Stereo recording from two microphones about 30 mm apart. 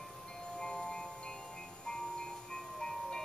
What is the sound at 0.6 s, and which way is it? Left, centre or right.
Music, left.